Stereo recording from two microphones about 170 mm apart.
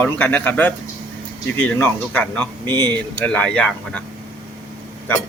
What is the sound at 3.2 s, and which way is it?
Speech, 5° left (ahead or behind).